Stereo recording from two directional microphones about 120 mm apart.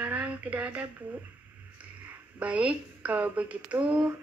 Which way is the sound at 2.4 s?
10° right (ahead or behind).